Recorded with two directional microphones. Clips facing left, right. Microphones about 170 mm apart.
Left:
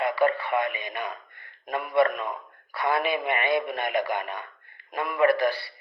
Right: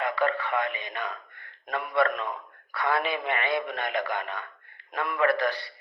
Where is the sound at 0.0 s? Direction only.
15° left (ahead or behind).